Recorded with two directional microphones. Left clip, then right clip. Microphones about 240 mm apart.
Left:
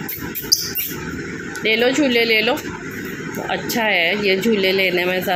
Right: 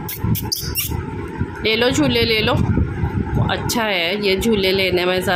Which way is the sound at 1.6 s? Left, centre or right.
Centre.